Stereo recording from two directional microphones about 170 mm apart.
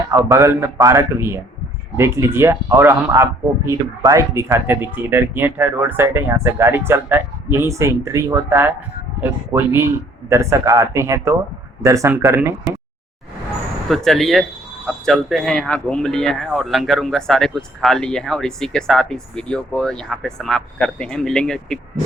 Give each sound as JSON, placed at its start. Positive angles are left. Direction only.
{"t": 0.1, "sound": "speech", "side_deg": -15}
{"t": 13.8, "sound": "speech", "side_deg": 0}